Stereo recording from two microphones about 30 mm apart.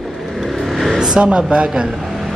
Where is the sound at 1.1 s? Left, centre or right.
Right.